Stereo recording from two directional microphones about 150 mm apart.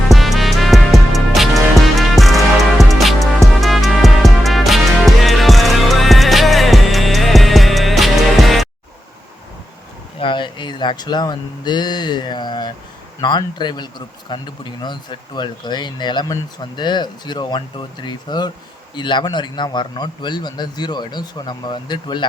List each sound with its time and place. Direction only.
0.1 s music: centre (ahead or behind)
10.2 s speech: 35° left (ahead or behind)